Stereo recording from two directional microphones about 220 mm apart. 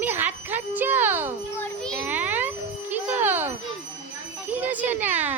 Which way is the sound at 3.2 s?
10° right (ahead or behind).